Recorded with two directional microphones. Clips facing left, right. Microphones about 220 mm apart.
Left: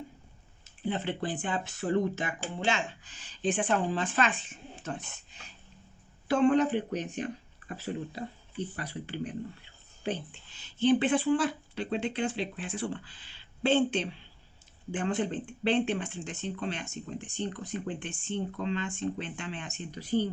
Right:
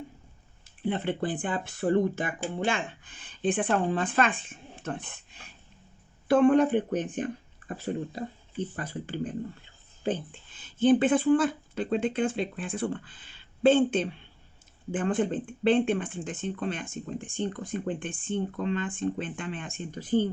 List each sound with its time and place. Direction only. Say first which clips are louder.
0.9 s speech: right 3 dB; 55° right (ahead or behind)
6.2 s speech: right 4 dB; 50° right (ahead or behind)